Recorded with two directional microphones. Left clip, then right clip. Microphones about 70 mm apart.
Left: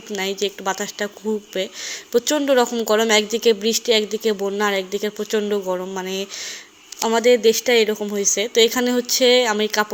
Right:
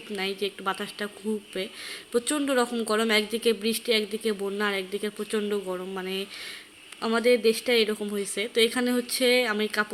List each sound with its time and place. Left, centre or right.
0.1 s a woman's voice: left